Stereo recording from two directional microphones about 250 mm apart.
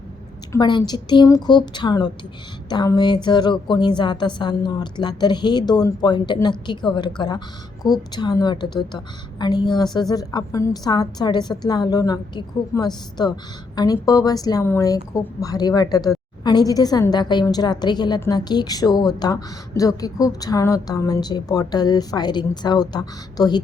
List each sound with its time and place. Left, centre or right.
0.5 s a woman's voice: centre